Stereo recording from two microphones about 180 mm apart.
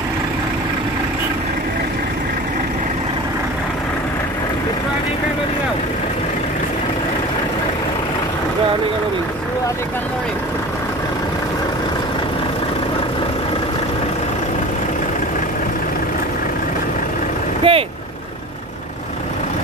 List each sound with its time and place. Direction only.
17.6 s vehicle: 30° right (ahead or behind)